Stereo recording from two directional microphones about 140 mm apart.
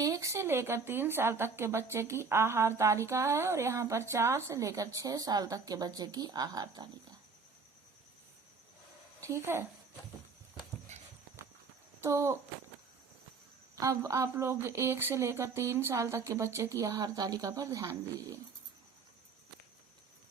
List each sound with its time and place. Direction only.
0.0 s a woman's voice: 25° right (ahead or behind)
9.5 s speech: 15° right (ahead or behind)
12.0 s a woman's voice: 20° right (ahead or behind)
13.7 s a woman's voice: 25° right (ahead or behind)